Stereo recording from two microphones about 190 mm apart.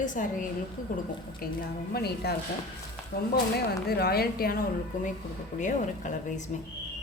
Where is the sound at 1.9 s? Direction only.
55° left (ahead or behind).